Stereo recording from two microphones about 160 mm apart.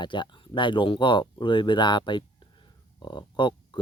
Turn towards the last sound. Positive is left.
turn(degrees=30)  # may be behind; listen again after turning